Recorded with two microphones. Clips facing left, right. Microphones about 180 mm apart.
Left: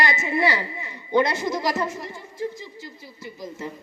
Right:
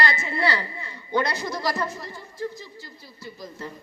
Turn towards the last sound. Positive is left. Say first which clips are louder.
# left 3 dB
turn(degrees=20)  # may be behind; listen again after turning